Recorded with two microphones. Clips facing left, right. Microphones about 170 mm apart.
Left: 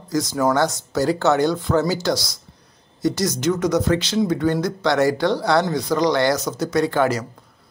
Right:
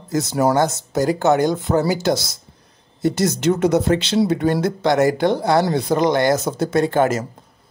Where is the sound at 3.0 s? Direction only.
55° right (ahead or behind).